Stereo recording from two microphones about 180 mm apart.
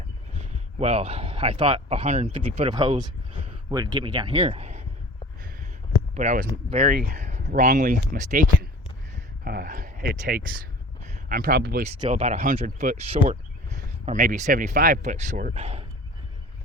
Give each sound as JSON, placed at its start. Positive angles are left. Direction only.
{"t": 0.3, "sound": "speech", "side_deg": -35}
{"t": 6.1, "sound": "speech", "side_deg": -45}
{"t": 6.8, "sound": "speech", "side_deg": -55}
{"t": 7.2, "sound": "speech", "side_deg": -40}
{"t": 9.4, "sound": "a sound", "side_deg": -55}
{"t": 11.0, "sound": "a sound", "side_deg": -40}
{"t": 11.3, "sound": "speech", "side_deg": -55}
{"t": 11.9, "sound": "speech", "side_deg": -35}
{"t": 15.5, "sound": "speech", "side_deg": -35}